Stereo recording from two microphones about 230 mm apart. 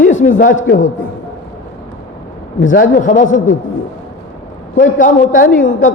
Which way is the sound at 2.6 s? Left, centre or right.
Left.